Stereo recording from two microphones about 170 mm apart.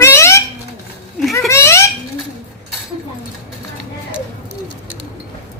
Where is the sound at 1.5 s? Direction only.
15° left (ahead or behind).